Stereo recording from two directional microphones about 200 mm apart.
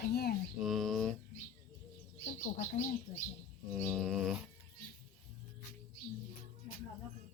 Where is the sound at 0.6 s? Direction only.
Centre (ahead or behind).